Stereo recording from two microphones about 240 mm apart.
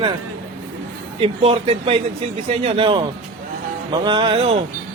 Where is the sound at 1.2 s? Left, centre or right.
Right.